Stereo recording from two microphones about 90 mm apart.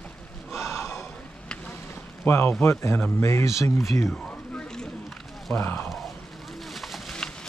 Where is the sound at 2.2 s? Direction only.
25° left (ahead or behind).